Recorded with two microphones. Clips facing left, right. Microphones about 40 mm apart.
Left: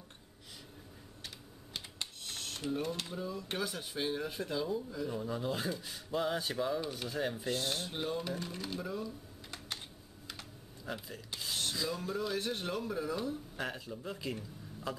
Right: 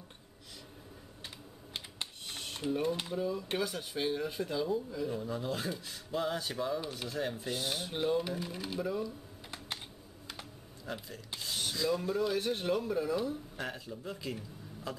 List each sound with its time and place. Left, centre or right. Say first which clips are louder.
1.7 s typewriter: right 1 dB; centre
2.3 s a sound: right 2 dB; centre
3.1 s speech: right 5 dB; centre
10.9 s speech: even; centre